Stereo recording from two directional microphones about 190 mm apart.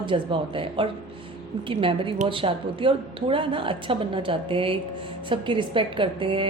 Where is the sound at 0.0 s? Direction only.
25° right (ahead or behind).